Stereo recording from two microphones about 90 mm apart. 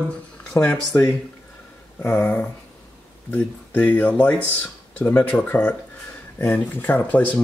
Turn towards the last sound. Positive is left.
turn(degrees=20)  # may be behind; listen again after turning